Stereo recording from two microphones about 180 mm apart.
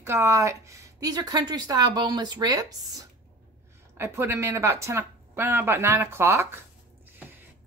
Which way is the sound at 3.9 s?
15° right (ahead or behind).